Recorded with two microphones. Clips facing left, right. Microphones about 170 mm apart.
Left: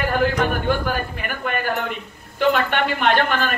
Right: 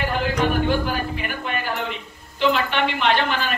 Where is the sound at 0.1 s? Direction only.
50° left (ahead or behind).